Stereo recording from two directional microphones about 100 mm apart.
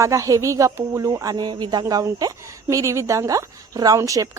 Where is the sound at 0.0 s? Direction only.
35° right (ahead or behind).